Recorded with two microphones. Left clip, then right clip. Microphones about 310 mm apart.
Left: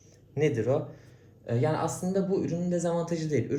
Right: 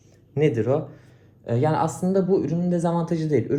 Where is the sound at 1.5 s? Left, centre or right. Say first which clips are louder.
Right 6 dB; centre.